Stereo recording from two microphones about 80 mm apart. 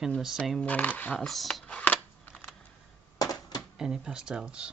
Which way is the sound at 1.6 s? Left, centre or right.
Centre.